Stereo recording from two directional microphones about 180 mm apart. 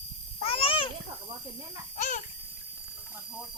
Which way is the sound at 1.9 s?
45° left (ahead or behind).